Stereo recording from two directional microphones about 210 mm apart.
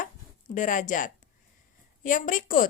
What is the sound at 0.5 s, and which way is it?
A woman's voice, 35° left (ahead or behind).